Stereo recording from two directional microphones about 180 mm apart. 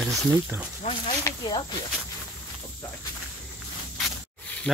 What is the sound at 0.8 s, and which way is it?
Speech, 25° left (ahead or behind).